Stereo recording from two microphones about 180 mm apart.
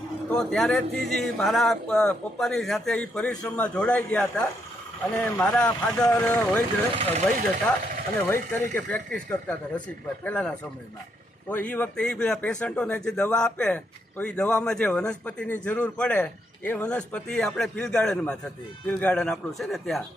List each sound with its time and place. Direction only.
0.3 s speech: 5° left (ahead or behind)
6.9 s speech: 35° right (ahead or behind)
8.3 s speech: 10° left (ahead or behind)